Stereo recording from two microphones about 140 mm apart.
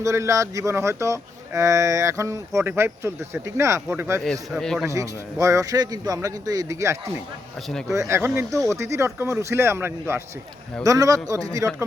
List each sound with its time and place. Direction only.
0.0 s speech: 20° right (ahead or behind)
4.2 s a man's voice: centre (ahead or behind)
4.9 s speech: 20° right (ahead or behind)